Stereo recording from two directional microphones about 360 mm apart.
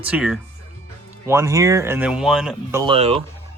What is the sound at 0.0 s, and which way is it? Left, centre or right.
Speech, centre.